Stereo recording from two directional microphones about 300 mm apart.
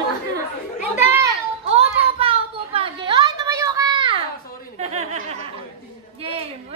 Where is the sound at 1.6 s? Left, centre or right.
Centre.